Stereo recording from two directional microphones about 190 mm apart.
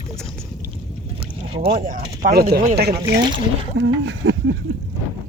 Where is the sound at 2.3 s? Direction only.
55° right (ahead or behind); by 4.5 s 70° right (ahead or behind).